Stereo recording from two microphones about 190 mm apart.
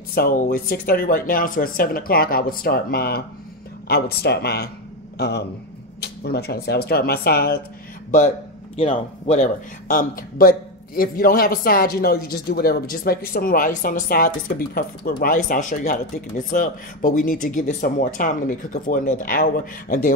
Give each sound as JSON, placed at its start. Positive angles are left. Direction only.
{"t": 0.1, "sound": "a man's voice", "side_deg": 50}
{"t": 8.7, "sound": "speech", "side_deg": 30}